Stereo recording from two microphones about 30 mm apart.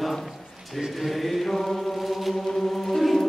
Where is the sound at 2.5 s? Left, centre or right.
Centre.